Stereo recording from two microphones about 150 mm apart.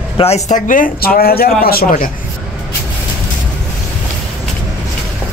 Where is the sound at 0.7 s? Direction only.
65° left (ahead or behind).